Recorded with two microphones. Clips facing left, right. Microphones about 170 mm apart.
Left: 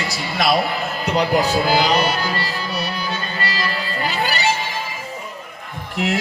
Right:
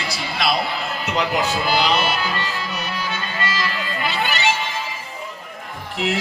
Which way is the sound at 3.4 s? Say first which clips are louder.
Even; 35° left (ahead or behind).